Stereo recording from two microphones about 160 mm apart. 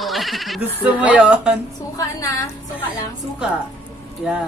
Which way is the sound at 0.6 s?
10° right (ahead or behind).